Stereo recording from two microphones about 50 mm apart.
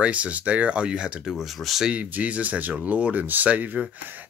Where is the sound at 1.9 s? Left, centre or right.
Right.